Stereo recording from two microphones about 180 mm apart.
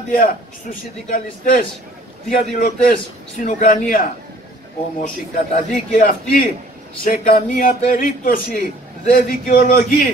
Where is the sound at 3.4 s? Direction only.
50° left (ahead or behind).